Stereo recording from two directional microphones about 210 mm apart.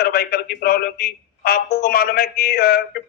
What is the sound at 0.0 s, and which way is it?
Speech, 45° left (ahead or behind).